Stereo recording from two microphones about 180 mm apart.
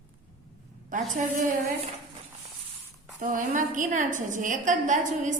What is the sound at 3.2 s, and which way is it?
A woman's voice, 45° right (ahead or behind).